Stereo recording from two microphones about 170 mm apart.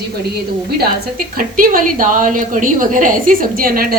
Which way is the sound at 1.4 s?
55° right (ahead or behind).